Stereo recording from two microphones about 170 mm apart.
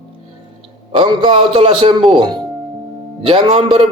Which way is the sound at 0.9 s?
30° right (ahead or behind).